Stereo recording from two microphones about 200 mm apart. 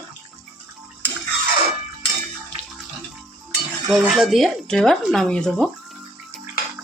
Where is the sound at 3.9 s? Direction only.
Centre (ahead or behind).